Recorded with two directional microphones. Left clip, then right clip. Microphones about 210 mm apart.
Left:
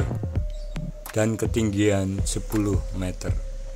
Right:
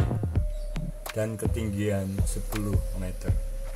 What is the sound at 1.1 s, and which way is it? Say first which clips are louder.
Speech: left 7 dB; 45° left (ahead or behind).